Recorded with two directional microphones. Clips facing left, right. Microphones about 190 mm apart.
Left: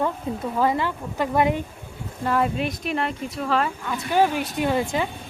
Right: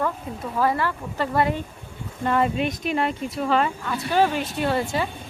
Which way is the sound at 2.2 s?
Centre (ahead or behind).